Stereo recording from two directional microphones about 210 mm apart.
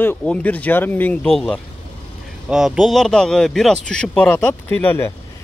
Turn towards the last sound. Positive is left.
turn(degrees=10)  # may be behind; listen again after turning